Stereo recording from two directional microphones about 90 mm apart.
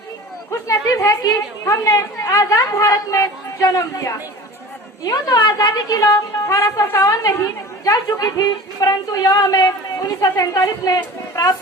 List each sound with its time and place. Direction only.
0.5 s speech: 35° left (ahead or behind)